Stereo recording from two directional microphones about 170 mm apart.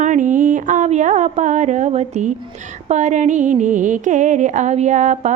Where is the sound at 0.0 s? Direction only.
50° right (ahead or behind).